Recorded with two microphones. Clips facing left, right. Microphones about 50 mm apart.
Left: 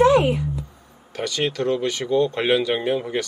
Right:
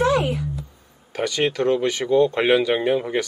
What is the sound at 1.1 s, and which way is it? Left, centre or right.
Speech, centre.